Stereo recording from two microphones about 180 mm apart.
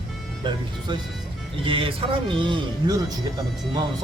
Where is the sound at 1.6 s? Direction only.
30° right (ahead or behind).